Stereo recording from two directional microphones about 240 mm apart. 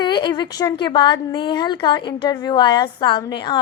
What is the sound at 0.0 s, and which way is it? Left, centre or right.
Child singing, centre.